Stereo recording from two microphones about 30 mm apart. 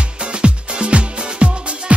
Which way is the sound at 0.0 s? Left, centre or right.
Right.